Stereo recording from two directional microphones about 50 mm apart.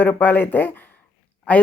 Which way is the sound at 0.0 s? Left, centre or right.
Left.